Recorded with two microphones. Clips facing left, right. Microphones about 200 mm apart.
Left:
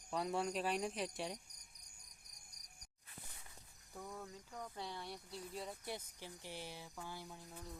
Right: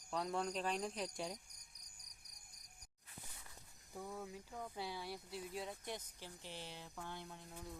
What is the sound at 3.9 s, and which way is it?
Speech, 5° right (ahead or behind).